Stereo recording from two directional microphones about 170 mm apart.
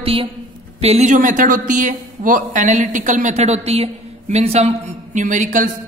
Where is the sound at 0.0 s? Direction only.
35° right (ahead or behind).